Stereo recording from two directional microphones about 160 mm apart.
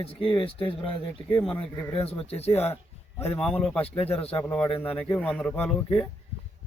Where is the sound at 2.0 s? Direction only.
40° left (ahead or behind).